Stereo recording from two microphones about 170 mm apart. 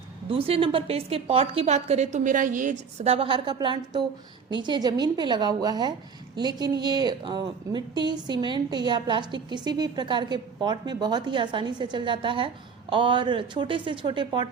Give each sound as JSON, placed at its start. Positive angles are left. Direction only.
{"t": 0.3, "sound": "a woman's voice", "side_deg": -35}